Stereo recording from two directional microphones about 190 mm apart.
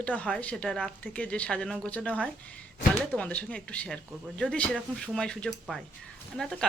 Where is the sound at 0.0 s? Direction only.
5° left (ahead or behind).